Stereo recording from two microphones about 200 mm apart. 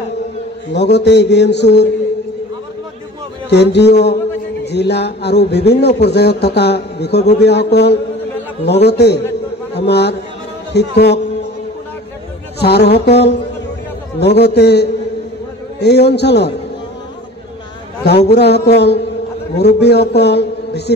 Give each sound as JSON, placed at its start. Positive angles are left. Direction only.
{"t": 0.7, "sound": "a man's voice", "side_deg": 60}
{"t": 3.4, "sound": "a man's voice", "side_deg": 60}
{"t": 12.5, "sound": "a man's voice", "side_deg": 55}
{"t": 18.0, "sound": "a man's voice", "side_deg": 55}
{"t": 20.2, "sound": "a sound", "side_deg": 55}